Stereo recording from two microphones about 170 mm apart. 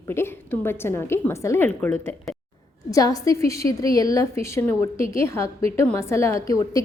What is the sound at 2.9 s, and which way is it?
A woman's voice, 20° left (ahead or behind).